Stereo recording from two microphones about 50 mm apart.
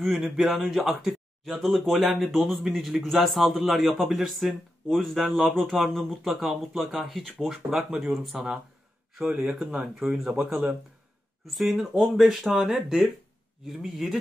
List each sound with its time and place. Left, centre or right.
0.0 s speech: centre
9.2 s speech: centre
11.7 s speech: centre